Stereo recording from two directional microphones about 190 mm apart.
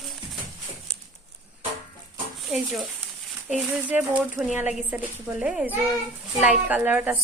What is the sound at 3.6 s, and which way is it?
A woman's voice, 5° right (ahead or behind).